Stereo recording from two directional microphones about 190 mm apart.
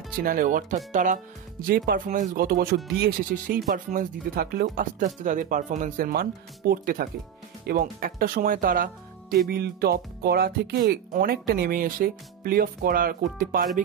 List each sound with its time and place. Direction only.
0.2 s speech: 45° right (ahead or behind)